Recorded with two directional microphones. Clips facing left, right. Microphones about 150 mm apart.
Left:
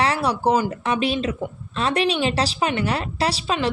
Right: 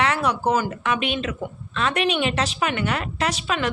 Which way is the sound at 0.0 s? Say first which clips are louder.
Left 1 dB; 35° left (ahead or behind).